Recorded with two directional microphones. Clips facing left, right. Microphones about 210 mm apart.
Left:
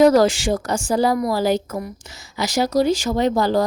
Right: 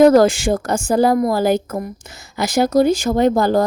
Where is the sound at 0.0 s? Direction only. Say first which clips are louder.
Right 3 dB; 55° right (ahead or behind).